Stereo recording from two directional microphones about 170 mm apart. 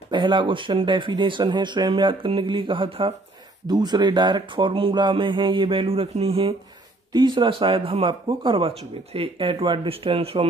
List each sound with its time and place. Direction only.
0.1 s speech: 25° right (ahead or behind)